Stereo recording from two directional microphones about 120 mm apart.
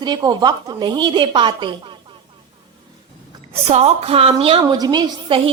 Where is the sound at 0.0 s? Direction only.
35° right (ahead or behind).